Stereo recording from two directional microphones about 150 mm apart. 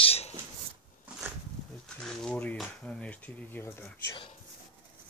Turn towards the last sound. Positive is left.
turn(degrees=15)  # may be behind; listen again after turning